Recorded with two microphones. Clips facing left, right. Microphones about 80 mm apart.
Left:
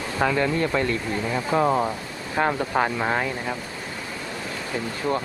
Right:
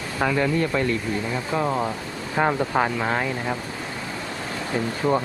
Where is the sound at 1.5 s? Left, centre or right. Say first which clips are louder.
Left 4 dB; centre.